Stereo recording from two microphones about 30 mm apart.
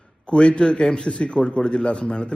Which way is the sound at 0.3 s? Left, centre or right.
Left.